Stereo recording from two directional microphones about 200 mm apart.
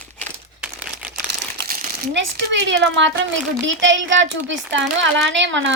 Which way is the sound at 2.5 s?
65° right (ahead or behind).